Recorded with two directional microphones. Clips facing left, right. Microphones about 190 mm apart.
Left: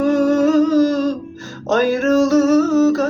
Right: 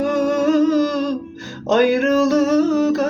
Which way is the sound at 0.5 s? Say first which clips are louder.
Left 2 dB; 15° right (ahead or behind).